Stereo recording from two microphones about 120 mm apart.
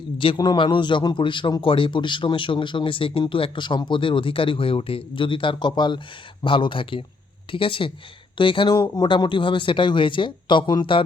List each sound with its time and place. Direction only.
0.3 s a man's voice: 40° left (ahead or behind)